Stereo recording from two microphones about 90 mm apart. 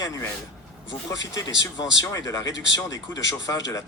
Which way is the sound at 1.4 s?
40° left (ahead or behind).